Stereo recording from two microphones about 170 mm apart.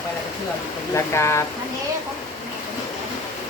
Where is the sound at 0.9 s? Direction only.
15° left (ahead or behind).